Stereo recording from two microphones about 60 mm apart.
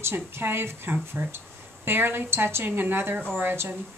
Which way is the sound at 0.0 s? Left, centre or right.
Right.